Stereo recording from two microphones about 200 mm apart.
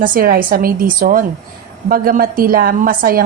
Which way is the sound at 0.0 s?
45° right (ahead or behind).